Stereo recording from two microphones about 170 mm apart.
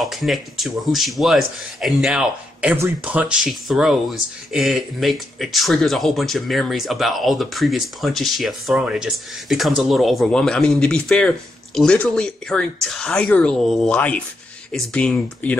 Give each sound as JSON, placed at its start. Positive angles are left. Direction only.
{"t": 0.0, "sound": "speech", "side_deg": 0}